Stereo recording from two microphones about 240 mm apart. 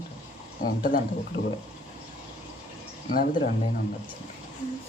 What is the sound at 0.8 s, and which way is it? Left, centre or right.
Speech, left.